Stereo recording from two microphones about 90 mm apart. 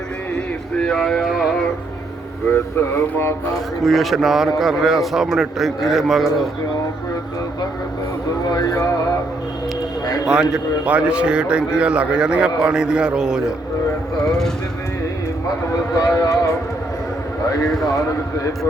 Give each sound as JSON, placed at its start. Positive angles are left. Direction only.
{"t": 0.3, "sound": "speech", "side_deg": 5}
{"t": 2.9, "sound": "speech", "side_deg": 30}
{"t": 3.8, "sound": "a man's voice", "side_deg": 0}
{"t": 8.4, "sound": "speech", "side_deg": 45}
{"t": 10.2, "sound": "a man's voice", "side_deg": -10}
{"t": 16.0, "sound": "speech", "side_deg": 40}